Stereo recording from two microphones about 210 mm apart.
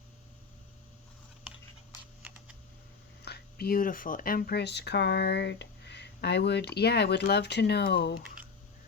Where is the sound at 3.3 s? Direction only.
50° left (ahead or behind).